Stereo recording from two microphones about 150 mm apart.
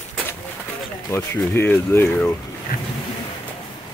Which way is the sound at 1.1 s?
15° left (ahead or behind).